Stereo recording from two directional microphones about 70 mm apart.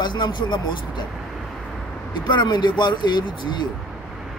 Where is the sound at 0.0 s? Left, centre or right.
Left.